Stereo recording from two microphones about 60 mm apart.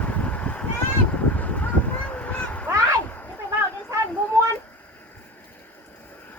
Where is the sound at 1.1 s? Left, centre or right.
Left.